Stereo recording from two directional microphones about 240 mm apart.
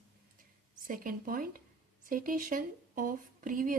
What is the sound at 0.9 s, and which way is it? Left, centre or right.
Speech, right.